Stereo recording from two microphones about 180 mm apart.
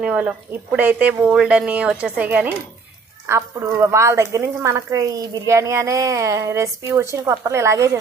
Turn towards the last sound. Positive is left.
turn(degrees=-15)  # may be behind; listen again after turning